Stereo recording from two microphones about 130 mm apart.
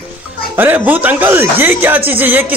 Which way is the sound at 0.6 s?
15° right (ahead or behind).